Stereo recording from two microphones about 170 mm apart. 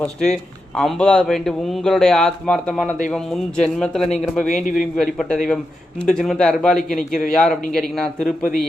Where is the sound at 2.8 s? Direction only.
50° left (ahead or behind).